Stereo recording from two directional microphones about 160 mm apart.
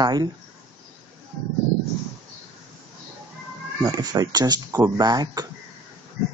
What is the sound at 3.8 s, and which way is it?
Speech, 25° right (ahead or behind).